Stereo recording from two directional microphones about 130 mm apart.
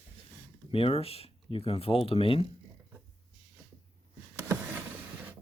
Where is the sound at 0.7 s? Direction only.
50° left (ahead or behind).